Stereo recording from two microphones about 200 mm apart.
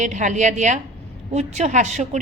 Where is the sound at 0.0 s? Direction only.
35° right (ahead or behind).